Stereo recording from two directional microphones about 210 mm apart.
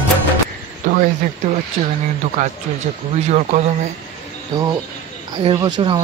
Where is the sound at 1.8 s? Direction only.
25° right (ahead or behind).